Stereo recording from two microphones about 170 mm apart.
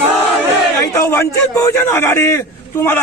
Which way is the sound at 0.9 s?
15° left (ahead or behind).